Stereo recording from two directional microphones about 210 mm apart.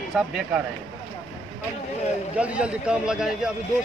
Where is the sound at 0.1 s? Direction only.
5° right (ahead or behind).